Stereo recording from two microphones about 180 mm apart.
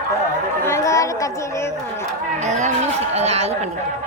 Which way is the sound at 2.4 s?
40° right (ahead or behind).